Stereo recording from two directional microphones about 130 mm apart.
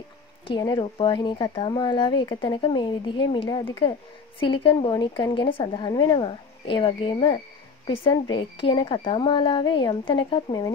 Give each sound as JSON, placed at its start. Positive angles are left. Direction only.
{"t": 0.5, "sound": "speech", "side_deg": 35}